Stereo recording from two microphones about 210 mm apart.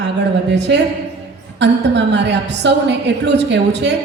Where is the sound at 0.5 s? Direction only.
55° right (ahead or behind).